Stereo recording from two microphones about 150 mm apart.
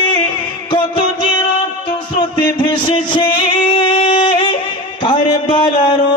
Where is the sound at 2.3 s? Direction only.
30° left (ahead or behind).